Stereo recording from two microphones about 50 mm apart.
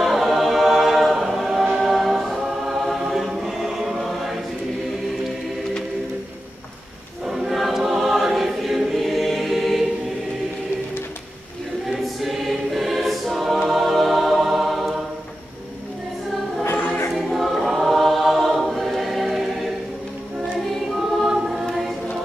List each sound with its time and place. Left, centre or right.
0.0 s a capella: centre
1.8 s choir: centre
7.2 s choir: centre
11.8 s choir: centre
17.1 s choir: centre
21.3 s choir: centre